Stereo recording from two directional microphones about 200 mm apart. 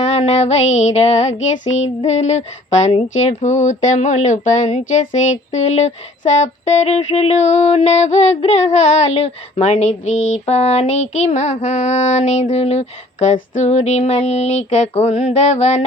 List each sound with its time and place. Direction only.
0.0 s speech: 30° left (ahead or behind)